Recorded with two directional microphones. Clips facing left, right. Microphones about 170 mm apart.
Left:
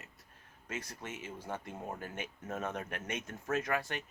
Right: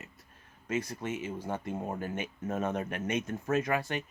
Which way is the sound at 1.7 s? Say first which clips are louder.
Right 6 dB; 25° right (ahead or behind).